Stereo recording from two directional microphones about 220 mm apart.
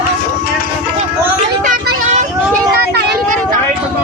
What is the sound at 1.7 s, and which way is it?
Vehicle, 40° right (ahead or behind).